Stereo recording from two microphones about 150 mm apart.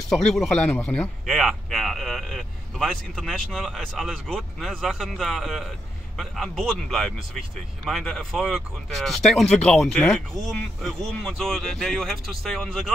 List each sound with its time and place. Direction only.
0.1 s a man's voice: 5° left (ahead or behind)